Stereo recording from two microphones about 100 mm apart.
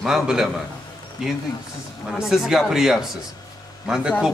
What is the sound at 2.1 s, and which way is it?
A man's voice, centre (ahead or behind).